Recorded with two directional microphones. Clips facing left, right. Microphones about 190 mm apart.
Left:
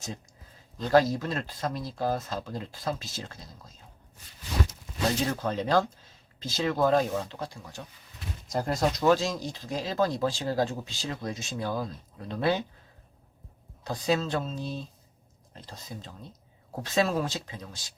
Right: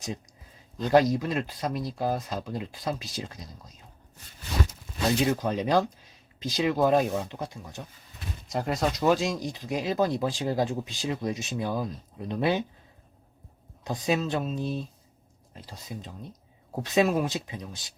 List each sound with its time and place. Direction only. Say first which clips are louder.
0.9 s speech: right 1 dB; 15° right (ahead or behind)
5.2 s speech: right 3 dB; 15° right (ahead or behind)
8.5 s speech: even; 5° right (ahead or behind)
13.8 s speech: even; 15° right (ahead or behind)